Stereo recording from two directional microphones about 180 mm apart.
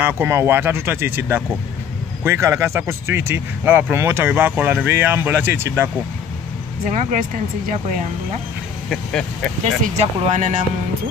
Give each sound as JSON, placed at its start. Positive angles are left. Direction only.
{"t": 0.0, "sound": "speech", "side_deg": -15}
{"t": 6.9, "sound": "speech", "side_deg": -45}
{"t": 8.8, "sound": "speech", "side_deg": 5}
{"t": 9.9, "sound": "speech", "side_deg": -40}